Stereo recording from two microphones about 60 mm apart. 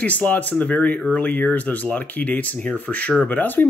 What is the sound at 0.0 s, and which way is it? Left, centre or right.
Speech, left.